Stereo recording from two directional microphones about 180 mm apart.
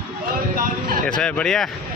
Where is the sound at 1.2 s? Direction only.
5° left (ahead or behind).